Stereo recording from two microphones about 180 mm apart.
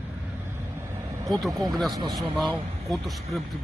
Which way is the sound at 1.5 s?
20° right (ahead or behind).